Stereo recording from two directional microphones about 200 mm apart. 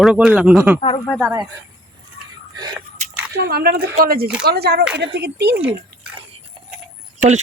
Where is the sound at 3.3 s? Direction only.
50° right (ahead or behind).